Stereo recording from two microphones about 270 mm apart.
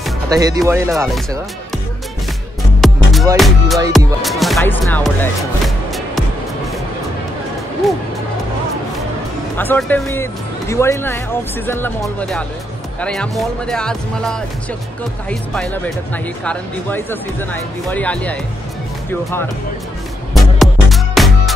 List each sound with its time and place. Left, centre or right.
0.3 s speech: centre
2.8 s music: centre
3.3 s speech: centre
9.6 s speech: centre
20.3 s music: centre